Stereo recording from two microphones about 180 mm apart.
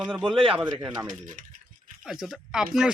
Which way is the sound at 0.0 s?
Centre (ahead or behind).